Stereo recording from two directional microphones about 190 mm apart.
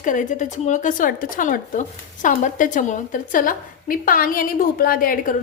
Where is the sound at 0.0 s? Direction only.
45° left (ahead or behind).